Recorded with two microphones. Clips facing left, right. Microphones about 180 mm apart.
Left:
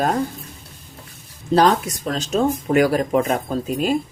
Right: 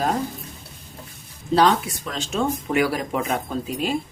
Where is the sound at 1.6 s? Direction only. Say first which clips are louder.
Left 2 dB; 45° left (ahead or behind).